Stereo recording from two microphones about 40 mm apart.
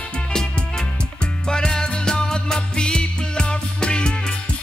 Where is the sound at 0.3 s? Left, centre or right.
Centre.